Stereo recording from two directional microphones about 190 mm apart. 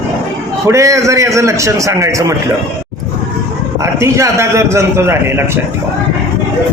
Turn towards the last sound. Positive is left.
turn(degrees=-10)  # may be behind; listen again after turning